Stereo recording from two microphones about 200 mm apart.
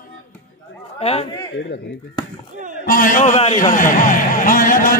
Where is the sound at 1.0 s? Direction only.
30° left (ahead or behind).